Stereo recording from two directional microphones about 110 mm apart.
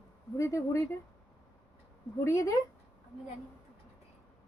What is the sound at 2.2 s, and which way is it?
Speech, 30° left (ahead or behind).